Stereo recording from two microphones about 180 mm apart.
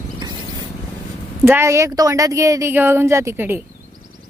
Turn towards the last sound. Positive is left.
turn(degrees=-10)  # may be behind; listen again after turning